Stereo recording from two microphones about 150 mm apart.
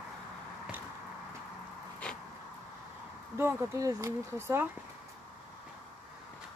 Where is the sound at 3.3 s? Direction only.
20° right (ahead or behind).